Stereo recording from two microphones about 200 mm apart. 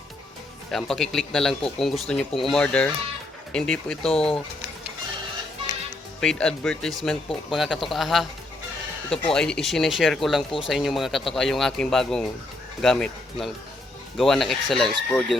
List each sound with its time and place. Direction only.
0.7 s speech: centre (ahead or behind)
4.1 s speech: 30° left (ahead or behind)
6.1 s speech: 5° left (ahead or behind)
9.3 s speech: 5° left (ahead or behind)